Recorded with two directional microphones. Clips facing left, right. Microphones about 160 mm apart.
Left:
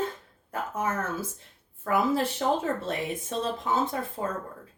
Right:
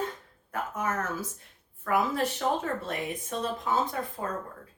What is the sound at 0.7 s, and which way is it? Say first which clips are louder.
Speech: left 2 dB; 25° left (ahead or behind).